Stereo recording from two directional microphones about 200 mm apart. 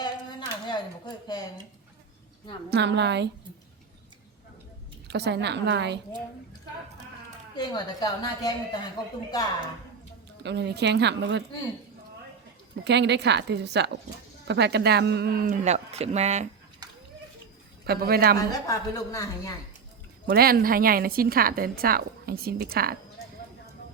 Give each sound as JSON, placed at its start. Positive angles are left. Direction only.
{"t": 0.0, "sound": "a sound", "side_deg": 20}
{"t": 2.6, "sound": "a woman's voice", "side_deg": -60}
{"t": 5.0, "sound": "a woman's voice", "side_deg": -55}
{"t": 7.5, "sound": "a woman's voice", "side_deg": 20}
{"t": 10.4, "sound": "a woman's voice", "side_deg": -60}
{"t": 12.8, "sound": "a woman's voice", "side_deg": -60}
{"t": 17.8, "sound": "a woman's voice", "side_deg": -50}
{"t": 18.3, "sound": "a woman's voice", "side_deg": 15}
{"t": 20.2, "sound": "a woman's voice", "side_deg": -50}